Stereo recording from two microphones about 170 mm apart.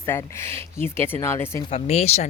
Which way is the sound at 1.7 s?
40° left (ahead or behind).